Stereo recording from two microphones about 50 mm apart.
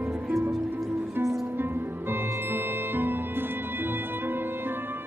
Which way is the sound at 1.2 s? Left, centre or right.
Right.